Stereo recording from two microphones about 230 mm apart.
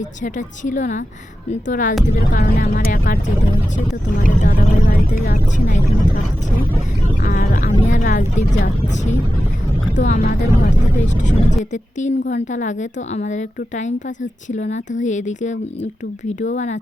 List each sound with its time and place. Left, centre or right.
0.2 s speech: left
7.2 s speech: left
9.9 s speech: left